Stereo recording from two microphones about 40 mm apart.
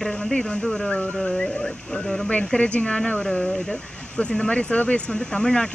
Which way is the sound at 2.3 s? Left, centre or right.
Left.